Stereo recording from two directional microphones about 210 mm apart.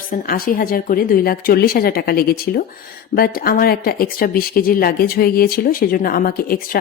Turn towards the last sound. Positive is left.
turn(degrees=45)  # may be behind; listen again after turning